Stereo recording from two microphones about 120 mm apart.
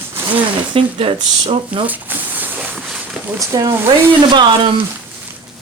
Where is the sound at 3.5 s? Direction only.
30° right (ahead or behind).